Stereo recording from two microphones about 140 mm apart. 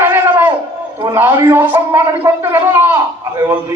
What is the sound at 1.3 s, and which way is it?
Speech, 30° right (ahead or behind).